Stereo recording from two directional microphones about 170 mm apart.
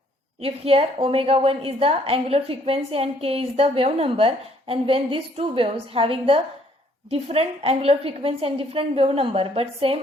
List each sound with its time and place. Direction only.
0.4 s a woman's voice: 35° right (ahead or behind)